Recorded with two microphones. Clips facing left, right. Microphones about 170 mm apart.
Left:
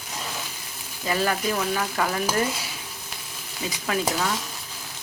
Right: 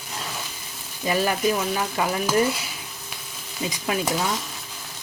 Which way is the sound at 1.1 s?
15° right (ahead or behind).